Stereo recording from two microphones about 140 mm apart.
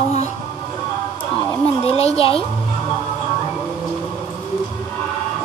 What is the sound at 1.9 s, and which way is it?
Speech, 45° left (ahead or behind).